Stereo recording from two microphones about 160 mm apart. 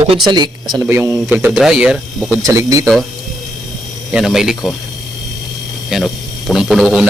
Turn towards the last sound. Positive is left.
turn(degrees=-5)  # may be behind; listen again after turning